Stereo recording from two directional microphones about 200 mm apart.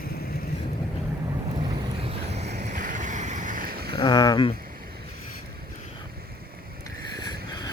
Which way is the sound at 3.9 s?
20° left (ahead or behind).